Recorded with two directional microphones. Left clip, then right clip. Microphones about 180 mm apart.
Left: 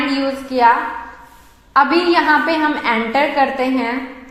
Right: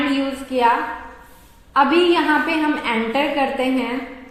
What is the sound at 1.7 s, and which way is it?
A woman's voice, 25° left (ahead or behind).